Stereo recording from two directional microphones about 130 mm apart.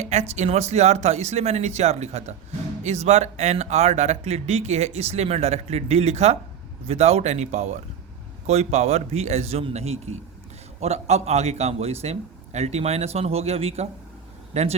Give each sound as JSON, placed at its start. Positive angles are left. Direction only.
{"t": 0.0, "sound": "speech", "side_deg": -60}